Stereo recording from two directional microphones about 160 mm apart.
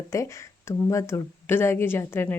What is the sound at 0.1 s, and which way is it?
Speech, 20° left (ahead or behind).